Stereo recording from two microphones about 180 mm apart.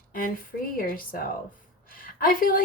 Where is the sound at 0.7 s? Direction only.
50° left (ahead or behind).